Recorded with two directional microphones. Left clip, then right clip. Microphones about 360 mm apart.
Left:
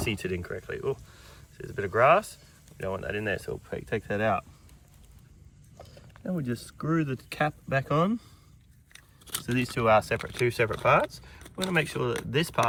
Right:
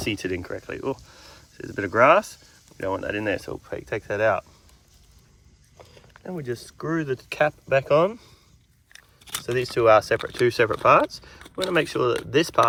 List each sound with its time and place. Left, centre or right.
0.0 s speech: centre
5.8 s speech: right
9.2 s keys jangling: centre
9.7 s speech: centre